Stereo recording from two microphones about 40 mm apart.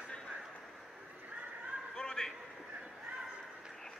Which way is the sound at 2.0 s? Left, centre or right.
Centre.